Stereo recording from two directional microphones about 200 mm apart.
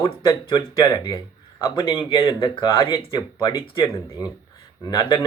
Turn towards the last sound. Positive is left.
turn(degrees=20)  # may be behind; listen again after turning